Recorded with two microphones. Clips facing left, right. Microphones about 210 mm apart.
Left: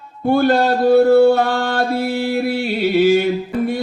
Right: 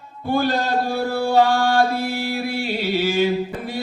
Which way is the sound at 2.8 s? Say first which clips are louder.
Left 9 dB; 50° left (ahead or behind).